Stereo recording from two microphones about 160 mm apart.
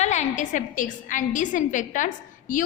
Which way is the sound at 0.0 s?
45° left (ahead or behind).